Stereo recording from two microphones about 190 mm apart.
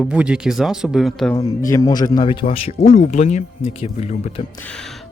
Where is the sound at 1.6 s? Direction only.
15° left (ahead or behind); by 4.4 s 35° left (ahead or behind).